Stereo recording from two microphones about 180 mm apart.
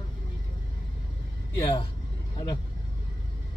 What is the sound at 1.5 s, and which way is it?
Speech, 25° left (ahead or behind).